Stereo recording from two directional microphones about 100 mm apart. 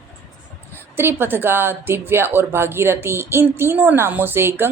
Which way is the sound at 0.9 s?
20° right (ahead or behind).